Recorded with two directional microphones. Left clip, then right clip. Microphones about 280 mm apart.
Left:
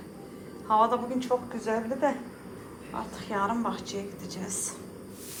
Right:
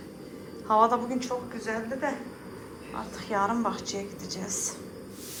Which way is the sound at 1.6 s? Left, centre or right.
Centre.